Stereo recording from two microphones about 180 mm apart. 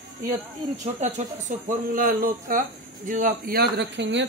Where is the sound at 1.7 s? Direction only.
50° right (ahead or behind); by 4.3 s 85° right.